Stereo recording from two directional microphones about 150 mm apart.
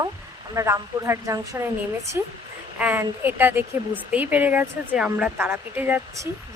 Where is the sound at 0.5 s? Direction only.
20° right (ahead or behind).